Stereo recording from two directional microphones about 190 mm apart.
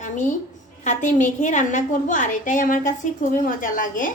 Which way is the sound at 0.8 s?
40° left (ahead or behind).